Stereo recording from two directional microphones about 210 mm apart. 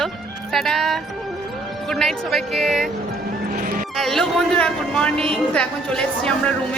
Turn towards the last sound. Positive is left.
turn(degrees=5)  # may be behind; listen again after turning